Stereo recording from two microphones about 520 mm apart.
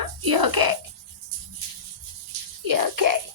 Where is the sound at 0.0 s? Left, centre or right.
Right.